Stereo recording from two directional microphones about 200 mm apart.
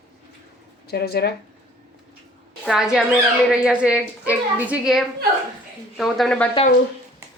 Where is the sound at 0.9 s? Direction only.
50° left (ahead or behind).